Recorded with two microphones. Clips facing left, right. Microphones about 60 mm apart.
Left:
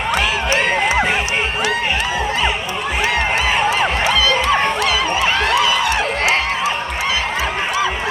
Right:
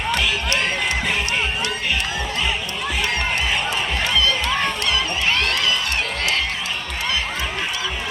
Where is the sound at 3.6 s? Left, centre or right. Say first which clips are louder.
Left 7 dB; left.